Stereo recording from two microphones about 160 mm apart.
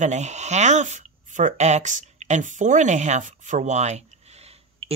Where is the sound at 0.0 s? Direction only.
45° right (ahead or behind).